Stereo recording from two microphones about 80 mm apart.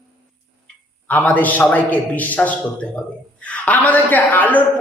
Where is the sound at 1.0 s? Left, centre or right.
Left.